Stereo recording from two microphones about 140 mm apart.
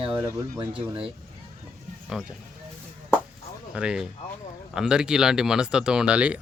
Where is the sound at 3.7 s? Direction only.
5° right (ahead or behind).